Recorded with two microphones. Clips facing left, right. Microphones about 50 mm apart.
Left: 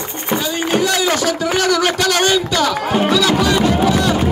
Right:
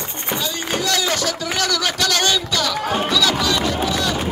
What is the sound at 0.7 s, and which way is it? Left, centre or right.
Speech, left.